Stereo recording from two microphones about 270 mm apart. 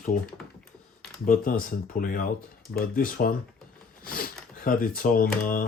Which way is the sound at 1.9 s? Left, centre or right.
Left.